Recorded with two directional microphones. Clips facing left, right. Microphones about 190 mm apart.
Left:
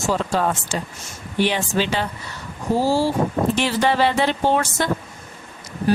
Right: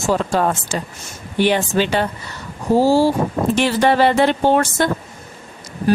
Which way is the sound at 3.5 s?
55° right (ahead or behind).